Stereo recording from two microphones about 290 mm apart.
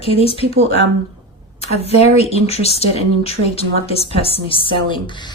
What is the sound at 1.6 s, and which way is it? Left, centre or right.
A woman's voice, left.